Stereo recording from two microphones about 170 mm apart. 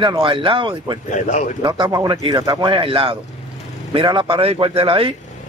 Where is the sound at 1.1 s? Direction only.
45° left (ahead or behind).